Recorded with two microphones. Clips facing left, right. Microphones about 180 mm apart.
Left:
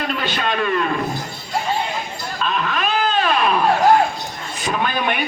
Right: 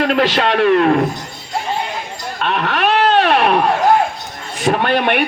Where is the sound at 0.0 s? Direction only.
85° right; by 1.0 s 65° right (ahead or behind).